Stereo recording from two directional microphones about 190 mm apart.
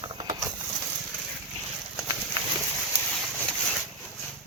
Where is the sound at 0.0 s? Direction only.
25° right (ahead or behind).